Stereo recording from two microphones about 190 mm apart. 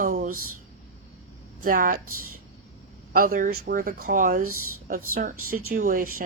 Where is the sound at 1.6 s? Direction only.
45° right (ahead or behind).